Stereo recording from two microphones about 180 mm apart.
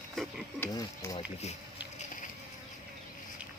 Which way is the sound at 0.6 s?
20° left (ahead or behind).